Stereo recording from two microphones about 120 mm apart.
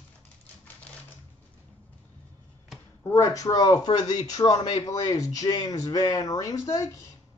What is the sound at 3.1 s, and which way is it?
Speech, 25° left (ahead or behind).